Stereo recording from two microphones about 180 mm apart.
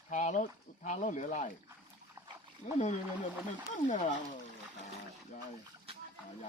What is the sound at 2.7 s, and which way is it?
Speech, 40° left (ahead or behind).